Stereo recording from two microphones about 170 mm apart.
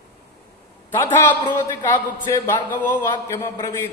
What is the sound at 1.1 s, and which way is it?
A man's voice, 15° left (ahead or behind).